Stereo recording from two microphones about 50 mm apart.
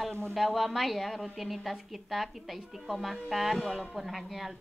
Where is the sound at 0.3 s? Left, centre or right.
Centre.